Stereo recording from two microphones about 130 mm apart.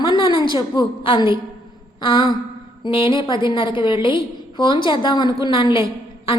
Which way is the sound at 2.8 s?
40° left (ahead or behind).